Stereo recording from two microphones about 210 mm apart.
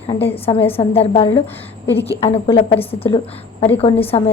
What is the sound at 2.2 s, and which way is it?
A woman's voice, 25° left (ahead or behind).